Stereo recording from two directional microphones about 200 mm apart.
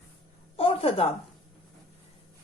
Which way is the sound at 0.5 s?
30° left (ahead or behind).